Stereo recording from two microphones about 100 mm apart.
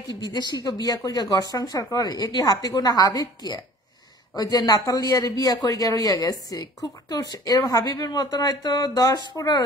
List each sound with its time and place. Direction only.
0.1 s speech: 45° left (ahead or behind)